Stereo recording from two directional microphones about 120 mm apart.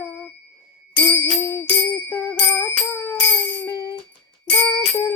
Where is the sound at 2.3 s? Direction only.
20° left (ahead or behind).